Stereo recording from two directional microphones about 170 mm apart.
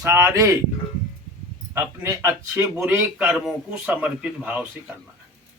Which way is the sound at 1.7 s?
15° right (ahead or behind).